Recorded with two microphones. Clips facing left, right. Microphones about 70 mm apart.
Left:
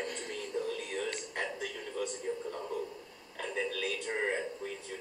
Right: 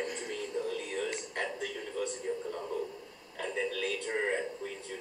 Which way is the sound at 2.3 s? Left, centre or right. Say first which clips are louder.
Right 1 dB; centre.